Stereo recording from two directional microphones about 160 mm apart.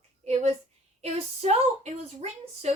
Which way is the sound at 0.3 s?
45° right (ahead or behind).